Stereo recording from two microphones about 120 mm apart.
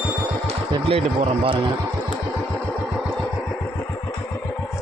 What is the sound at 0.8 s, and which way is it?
Speech, 50° right (ahead or behind).